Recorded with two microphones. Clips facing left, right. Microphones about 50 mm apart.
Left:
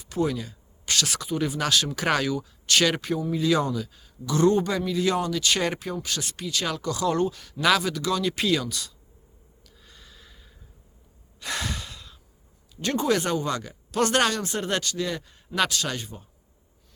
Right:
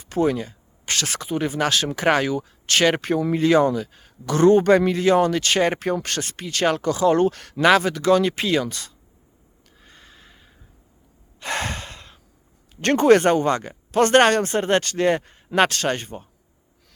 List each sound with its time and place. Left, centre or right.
0.0 s a man's voice: right
5.8 s speech: right
7.3 s speech: right
7.6 s a man's voice: right
9.8 s snort: right
11.3 s gasp: right
12.8 s speech: right